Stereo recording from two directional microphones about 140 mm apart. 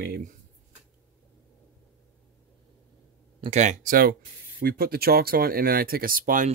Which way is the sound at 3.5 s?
55° right (ahead or behind).